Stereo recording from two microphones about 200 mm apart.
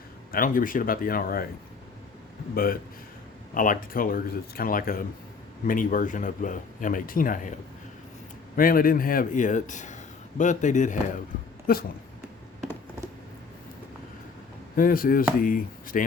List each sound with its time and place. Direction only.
0.3 s speech: 45° left (ahead or behind)
2.6 s speech: 45° left (ahead or behind)
8.5 s speech: 45° left (ahead or behind)
14.8 s speech: 45° left (ahead or behind)